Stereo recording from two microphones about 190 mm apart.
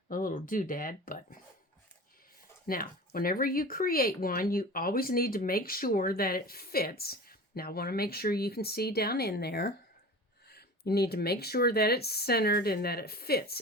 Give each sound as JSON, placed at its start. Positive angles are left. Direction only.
{"t": 0.1, "sound": "speech", "side_deg": 45}
{"t": 2.6, "sound": "speech", "side_deg": 50}